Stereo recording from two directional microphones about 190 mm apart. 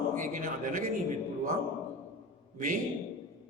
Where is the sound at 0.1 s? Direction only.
45° right (ahead or behind).